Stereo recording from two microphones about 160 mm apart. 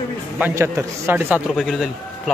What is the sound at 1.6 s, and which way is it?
Speech, centre (ahead or behind).